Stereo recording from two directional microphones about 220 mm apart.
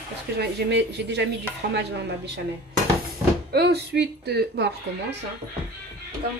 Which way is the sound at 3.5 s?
45° right (ahead or behind).